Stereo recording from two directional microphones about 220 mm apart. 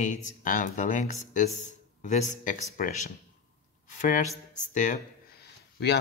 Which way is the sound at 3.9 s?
35° left (ahead or behind).